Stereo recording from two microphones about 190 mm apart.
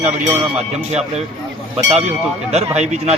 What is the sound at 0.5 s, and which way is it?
Speech, 35° right (ahead or behind).